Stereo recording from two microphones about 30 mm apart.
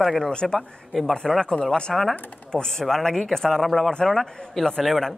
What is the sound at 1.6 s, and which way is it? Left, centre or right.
Speech, left.